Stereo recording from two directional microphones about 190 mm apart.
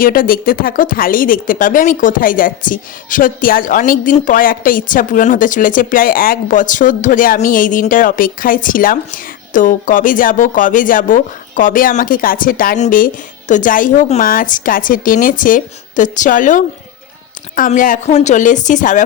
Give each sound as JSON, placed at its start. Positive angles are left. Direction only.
{"t": 0.0, "sound": "speech", "side_deg": 50}